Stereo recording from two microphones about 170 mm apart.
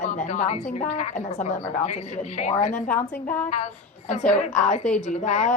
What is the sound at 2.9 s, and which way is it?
Speech, 10° left (ahead or behind).